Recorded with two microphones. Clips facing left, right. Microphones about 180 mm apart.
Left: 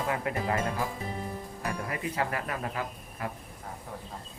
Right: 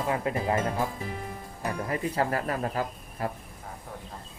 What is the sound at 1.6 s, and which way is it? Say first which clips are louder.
Speech: right 5 dB; 30° right (ahead or behind).